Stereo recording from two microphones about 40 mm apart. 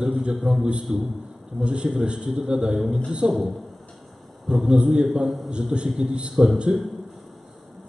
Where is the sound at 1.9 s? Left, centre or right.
Right.